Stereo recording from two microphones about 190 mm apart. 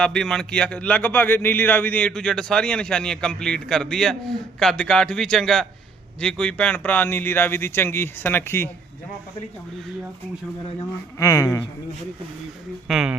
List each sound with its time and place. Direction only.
0.0 s speech: 5° left (ahead or behind)
11.2 s speech: 15° left (ahead or behind)
12.9 s speech: 5° right (ahead or behind)